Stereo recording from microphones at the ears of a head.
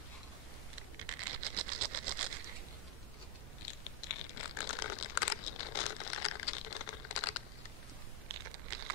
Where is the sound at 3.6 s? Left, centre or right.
Left.